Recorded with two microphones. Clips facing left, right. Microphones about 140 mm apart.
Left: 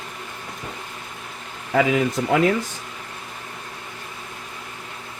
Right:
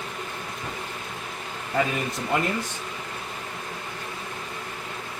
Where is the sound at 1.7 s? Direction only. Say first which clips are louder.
Left 7 dB; 90° left.